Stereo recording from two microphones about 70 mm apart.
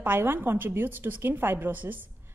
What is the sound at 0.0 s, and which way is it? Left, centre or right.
A woman's voice, right.